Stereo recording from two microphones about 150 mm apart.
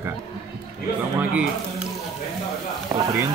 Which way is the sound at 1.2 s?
10° right (ahead or behind).